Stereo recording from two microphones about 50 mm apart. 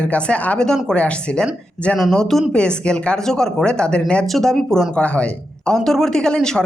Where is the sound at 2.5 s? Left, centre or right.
Centre.